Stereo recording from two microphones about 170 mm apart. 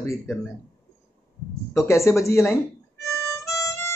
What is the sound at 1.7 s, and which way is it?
Speech, 15° left (ahead or behind).